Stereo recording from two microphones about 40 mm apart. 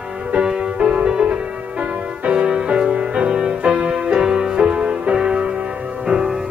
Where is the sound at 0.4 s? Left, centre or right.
Right.